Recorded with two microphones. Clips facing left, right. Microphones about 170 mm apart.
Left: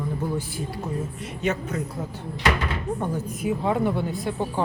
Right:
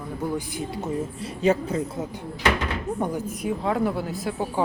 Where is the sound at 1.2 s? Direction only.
30° right (ahead or behind).